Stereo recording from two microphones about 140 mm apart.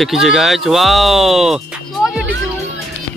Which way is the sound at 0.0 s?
Centre (ahead or behind).